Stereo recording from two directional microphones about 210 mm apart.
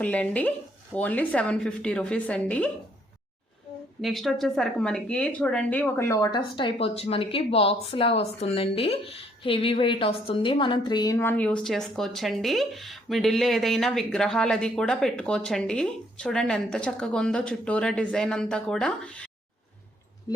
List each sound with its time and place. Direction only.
0.0 s speech: 5° left (ahead or behind)
4.0 s speech: centre (ahead or behind)
20.3 s a sound: 20° left (ahead or behind)